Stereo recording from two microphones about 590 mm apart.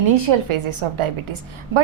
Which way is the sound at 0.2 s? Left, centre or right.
Right.